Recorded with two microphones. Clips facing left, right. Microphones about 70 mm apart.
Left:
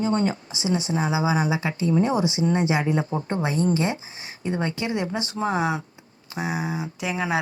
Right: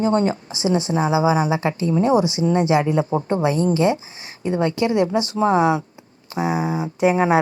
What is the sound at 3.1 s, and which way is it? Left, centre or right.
Speech, right.